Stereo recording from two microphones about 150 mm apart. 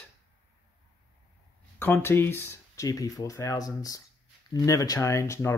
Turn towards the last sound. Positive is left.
turn(degrees=20)  # may be behind; listen again after turning